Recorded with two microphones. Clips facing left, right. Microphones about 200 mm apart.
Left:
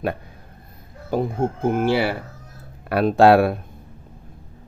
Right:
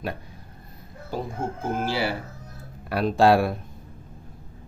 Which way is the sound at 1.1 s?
60° left (ahead or behind).